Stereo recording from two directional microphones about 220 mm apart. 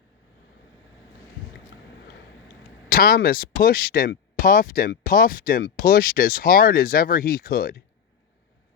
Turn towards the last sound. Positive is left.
turn(degrees=40)  # may be behind; listen again after turning